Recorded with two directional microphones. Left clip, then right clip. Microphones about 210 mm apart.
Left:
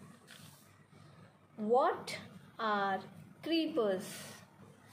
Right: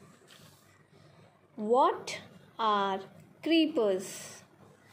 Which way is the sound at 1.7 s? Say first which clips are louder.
Right 4 dB; 25° right (ahead or behind).